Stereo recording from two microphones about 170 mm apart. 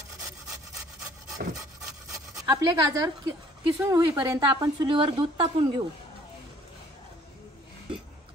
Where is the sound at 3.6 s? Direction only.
15° right (ahead or behind).